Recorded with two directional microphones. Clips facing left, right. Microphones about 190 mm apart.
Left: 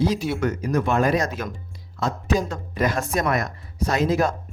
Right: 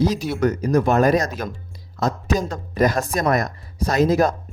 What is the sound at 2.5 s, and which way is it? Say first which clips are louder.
Speech: right 4 dB; 40° right (ahead or behind).